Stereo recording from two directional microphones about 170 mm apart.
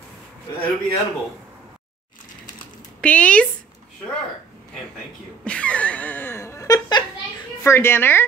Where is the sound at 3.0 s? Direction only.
5° left (ahead or behind).